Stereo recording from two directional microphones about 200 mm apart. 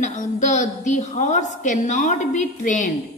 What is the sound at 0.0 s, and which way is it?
A woman's voice, 35° left (ahead or behind).